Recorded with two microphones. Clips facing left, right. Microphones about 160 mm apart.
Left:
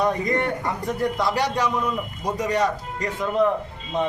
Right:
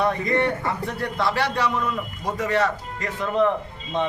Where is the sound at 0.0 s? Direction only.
15° left (ahead or behind).